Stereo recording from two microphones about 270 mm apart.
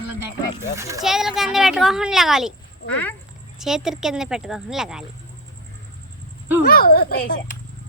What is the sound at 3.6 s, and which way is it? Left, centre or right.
A woman's voice, centre.